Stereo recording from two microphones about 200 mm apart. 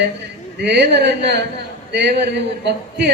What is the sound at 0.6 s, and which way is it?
A woman's voice, 55° right (ahead or behind).